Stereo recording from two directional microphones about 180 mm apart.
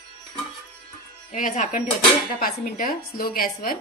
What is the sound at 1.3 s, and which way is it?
A woman's voice, 45° left (ahead or behind).